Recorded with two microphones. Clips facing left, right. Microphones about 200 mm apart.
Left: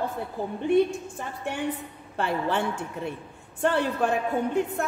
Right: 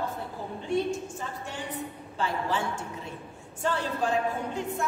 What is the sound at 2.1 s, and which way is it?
A woman's voice, 60° left (ahead or behind).